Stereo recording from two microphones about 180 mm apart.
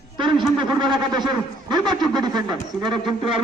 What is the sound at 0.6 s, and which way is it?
A man's voice, 25° right (ahead or behind).